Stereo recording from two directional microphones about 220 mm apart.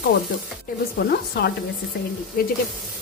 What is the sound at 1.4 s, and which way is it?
Sizzle, 50° left (ahead or behind).